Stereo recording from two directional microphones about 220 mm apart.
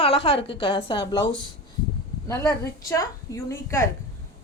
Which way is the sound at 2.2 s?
10° left (ahead or behind).